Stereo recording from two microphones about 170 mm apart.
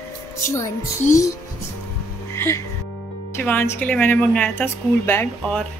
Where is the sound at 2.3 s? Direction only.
15° left (ahead or behind).